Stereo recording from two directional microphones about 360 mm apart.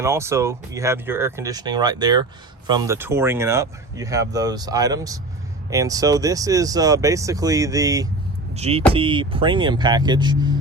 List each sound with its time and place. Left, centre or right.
0.0 s speech: centre